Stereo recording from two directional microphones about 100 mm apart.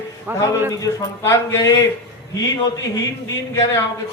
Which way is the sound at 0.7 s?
30° left (ahead or behind).